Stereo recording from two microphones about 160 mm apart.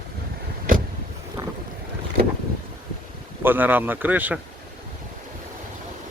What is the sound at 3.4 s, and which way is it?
Speech, 10° right (ahead or behind).